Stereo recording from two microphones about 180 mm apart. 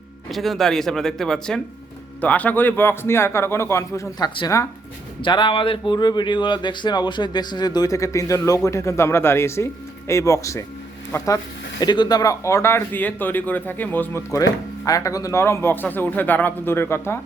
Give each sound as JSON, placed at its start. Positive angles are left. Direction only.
{"t": 0.3, "sound": "speech", "side_deg": 0}
{"t": 11.8, "sound": "speech", "side_deg": 20}